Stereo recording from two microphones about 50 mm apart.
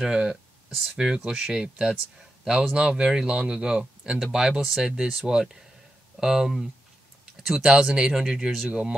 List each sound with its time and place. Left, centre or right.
0.0 s speech: centre